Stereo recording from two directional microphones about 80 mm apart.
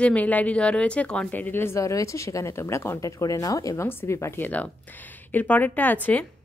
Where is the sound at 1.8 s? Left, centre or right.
Left.